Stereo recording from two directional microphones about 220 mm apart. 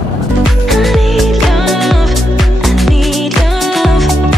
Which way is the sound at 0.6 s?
Centre (ahead or behind).